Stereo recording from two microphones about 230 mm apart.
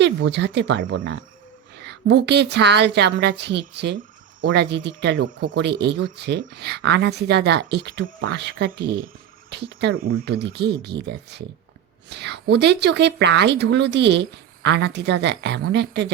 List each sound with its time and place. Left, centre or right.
0.0 s speech: right